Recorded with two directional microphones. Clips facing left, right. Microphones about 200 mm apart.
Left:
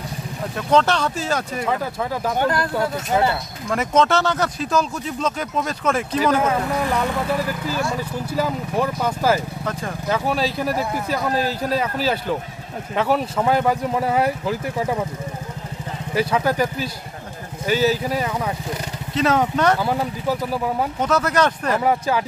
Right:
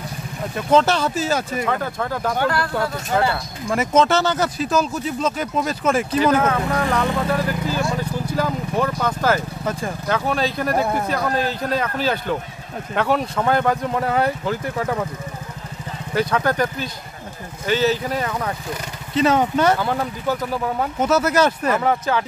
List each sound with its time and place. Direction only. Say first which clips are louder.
0.6 s speech: right 1 dB; 5° right (ahead or behind)
2.3 s speech: left 2 dB; 20° left (ahead or behind)
3.7 s speech: right 1 dB; 5° right (ahead or behind)
6.4 s speech: right 1 dB; 10° left (ahead or behind)
9.7 s speech: right 3 dB; 10° right (ahead or behind)
10.0 s speech: even; 5° left (ahead or behind)
10.7 s speech: right 3 dB; 60° right (ahead or behind)
11.1 s speech: even; 5° left (ahead or behind)
16.2 s speech: even; 5° left (ahead or behind)
21.0 s speech: right 3 dB; 5° right (ahead or behind)
21.8 s speech: left 3 dB; 10° left (ahead or behind)